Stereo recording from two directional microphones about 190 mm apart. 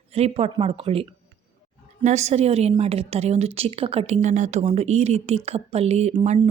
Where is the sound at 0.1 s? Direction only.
30° right (ahead or behind).